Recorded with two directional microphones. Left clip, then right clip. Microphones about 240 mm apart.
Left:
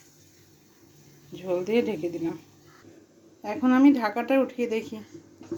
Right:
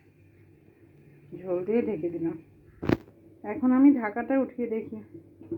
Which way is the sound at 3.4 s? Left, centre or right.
Centre.